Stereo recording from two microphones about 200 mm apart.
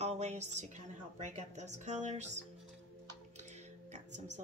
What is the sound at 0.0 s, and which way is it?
A woman's voice, 35° right (ahead or behind).